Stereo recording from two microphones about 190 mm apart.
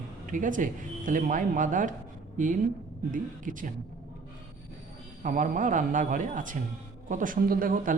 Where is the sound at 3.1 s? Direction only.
45° right (ahead or behind).